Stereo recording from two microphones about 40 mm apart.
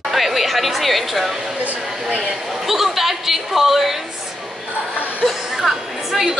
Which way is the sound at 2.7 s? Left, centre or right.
Centre.